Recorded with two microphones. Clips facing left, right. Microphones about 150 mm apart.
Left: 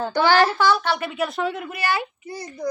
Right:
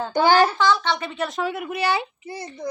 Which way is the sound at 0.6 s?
5° left (ahead or behind).